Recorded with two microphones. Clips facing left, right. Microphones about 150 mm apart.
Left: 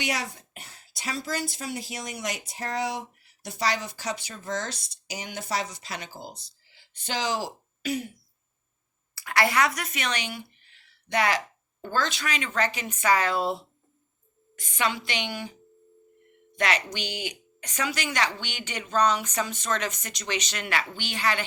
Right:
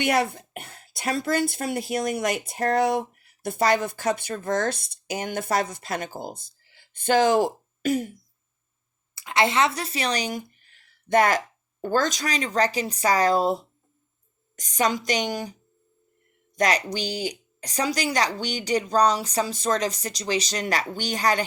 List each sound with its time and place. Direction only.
0.0 s speech: 55° right (ahead or behind)
9.1 s speech: 20° right (ahead or behind); by 21.4 s 40° right (ahead or behind)